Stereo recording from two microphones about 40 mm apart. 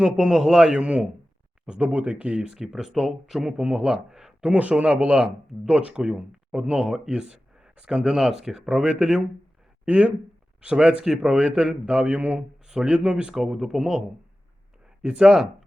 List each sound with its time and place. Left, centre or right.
0.2 s speech: centre
0.8 s speech: right
2.5 s speech: centre
3.6 s speech: right
4.1 s a sound: centre
4.4 s speech: right; by 7.1 s centre
7.1 s speech: right
11.0 s speech: centre
11.9 s speech: right
12.6 s speech: centre
13.5 s speech: centre
15.0 s speech: right